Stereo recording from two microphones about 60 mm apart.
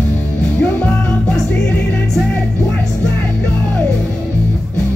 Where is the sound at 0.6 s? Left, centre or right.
Left.